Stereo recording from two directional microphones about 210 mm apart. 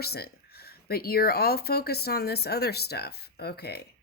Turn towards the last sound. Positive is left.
turn(degrees=50)  # may be behind; listen again after turning